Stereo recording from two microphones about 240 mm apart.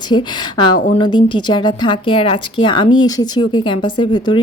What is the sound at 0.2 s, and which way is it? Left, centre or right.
Speech, centre.